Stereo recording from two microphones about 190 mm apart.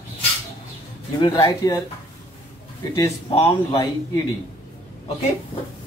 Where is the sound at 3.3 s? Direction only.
25° left (ahead or behind).